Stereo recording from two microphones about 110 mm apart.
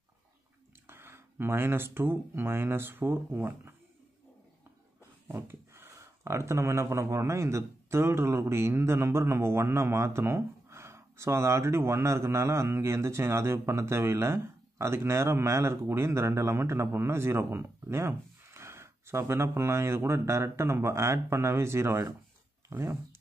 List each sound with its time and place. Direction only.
0.8 s speech: 20° right (ahead or behind)
5.3 s speech: 25° right (ahead or behind)